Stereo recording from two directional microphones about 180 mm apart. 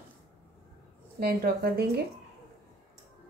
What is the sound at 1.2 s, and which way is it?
Speech, 55° right (ahead or behind).